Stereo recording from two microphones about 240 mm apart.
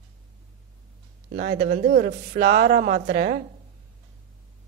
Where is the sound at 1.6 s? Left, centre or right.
Right.